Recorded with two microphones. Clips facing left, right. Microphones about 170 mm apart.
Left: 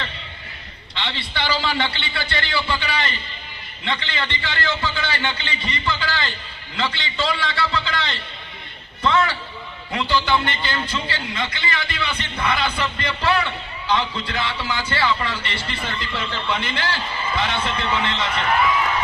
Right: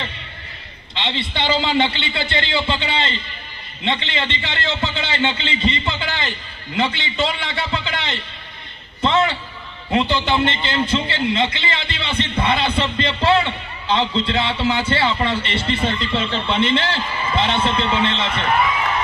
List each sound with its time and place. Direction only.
0.9 s a man's voice: 20° right (ahead or behind)
9.0 s a sound: 25° right (ahead or behind)
9.9 s a man's voice: 25° right (ahead or behind)